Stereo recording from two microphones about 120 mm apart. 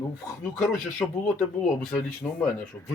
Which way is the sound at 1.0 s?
10° left (ahead or behind).